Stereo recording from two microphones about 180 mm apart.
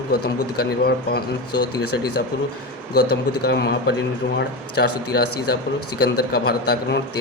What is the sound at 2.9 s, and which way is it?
Speech, 65° left (ahead or behind).